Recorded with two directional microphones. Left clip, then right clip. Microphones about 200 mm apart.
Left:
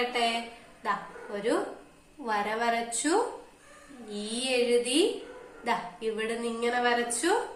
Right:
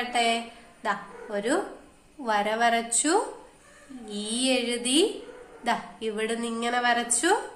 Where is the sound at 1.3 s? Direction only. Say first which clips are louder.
Right 2 dB; 45° right (ahead or behind).